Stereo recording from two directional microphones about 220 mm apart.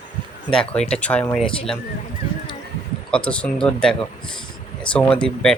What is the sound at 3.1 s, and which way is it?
Speech, 5° left (ahead or behind).